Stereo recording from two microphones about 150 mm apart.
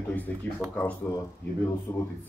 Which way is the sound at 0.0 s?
10° left (ahead or behind).